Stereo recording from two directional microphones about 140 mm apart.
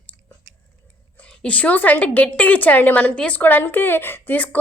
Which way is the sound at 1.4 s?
10° left (ahead or behind).